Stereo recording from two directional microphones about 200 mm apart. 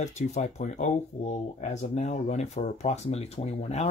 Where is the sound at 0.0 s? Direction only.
35° left (ahead or behind).